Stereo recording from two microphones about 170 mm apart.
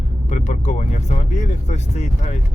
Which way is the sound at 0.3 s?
45° left (ahead or behind).